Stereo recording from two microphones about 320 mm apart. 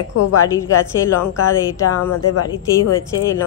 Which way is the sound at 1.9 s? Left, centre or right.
Left.